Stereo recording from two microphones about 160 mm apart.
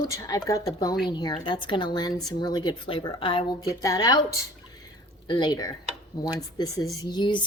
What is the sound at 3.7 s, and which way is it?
Speech, 20° left (ahead or behind).